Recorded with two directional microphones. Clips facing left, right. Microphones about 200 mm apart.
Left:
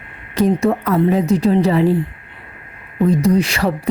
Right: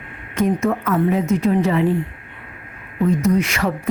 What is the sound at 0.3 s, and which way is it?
Speech, 35° left (ahead or behind).